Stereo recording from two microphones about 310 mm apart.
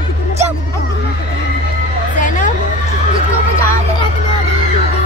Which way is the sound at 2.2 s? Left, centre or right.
Left.